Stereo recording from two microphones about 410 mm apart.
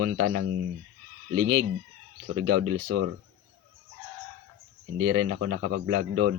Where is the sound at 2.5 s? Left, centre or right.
Right.